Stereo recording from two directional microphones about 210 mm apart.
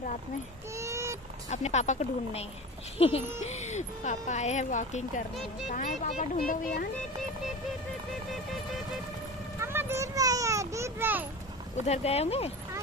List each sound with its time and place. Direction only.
0.7 s vehicle: 15° right (ahead or behind)
1.5 s speech: 35° left (ahead or behind)
3.4 s speech: 35° left (ahead or behind)
5.3 s speech: centre (ahead or behind)
5.7 s a child's voice: 35° left (ahead or behind)
9.6 s a child's voice: 10° right (ahead or behind)
11.9 s speech: 30° left (ahead or behind)